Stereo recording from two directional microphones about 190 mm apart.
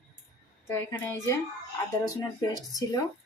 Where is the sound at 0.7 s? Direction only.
15° left (ahead or behind).